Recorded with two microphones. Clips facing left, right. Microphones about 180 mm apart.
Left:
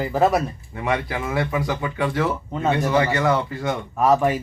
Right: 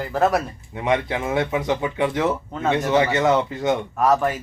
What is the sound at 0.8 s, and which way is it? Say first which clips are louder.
Speech: right 2 dB; 20° right (ahead or behind).